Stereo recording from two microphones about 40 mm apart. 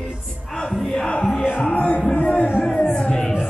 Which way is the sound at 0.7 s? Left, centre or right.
Centre.